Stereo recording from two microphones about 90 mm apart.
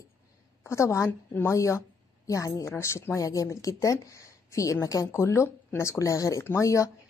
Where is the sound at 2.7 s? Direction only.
25° left (ahead or behind).